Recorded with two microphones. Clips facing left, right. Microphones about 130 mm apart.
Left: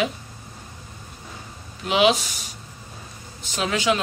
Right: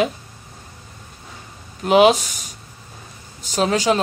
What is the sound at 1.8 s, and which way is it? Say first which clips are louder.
Speech: right 6 dB; 45° right (ahead or behind).